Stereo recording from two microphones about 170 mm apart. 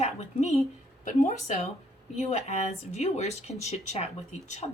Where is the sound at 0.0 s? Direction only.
40° left (ahead or behind).